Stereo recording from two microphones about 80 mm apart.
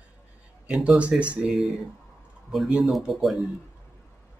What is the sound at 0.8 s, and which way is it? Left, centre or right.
Speech, centre.